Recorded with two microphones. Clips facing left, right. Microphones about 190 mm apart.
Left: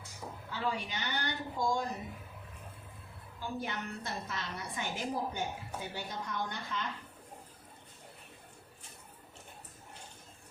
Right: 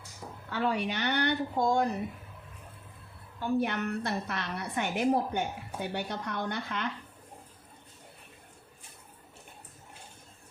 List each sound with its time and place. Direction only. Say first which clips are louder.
0.5 s a woman's voice: right 7 dB; 65° right (ahead or behind)
3.4 s a woman's voice: right 9 dB; 65° right (ahead or behind)